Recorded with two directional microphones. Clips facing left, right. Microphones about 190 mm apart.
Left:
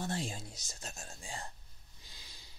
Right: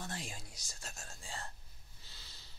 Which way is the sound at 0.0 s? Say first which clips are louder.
Left 7 dB; 25° left (ahead or behind).